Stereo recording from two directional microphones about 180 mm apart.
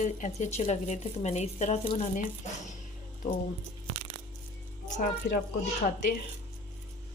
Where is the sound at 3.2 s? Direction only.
50° left (ahead or behind).